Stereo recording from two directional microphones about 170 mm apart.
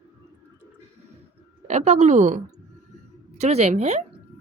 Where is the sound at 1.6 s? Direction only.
40° right (ahead or behind).